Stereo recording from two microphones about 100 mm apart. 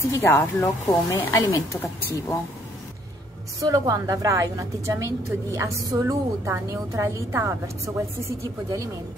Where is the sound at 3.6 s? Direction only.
35° right (ahead or behind).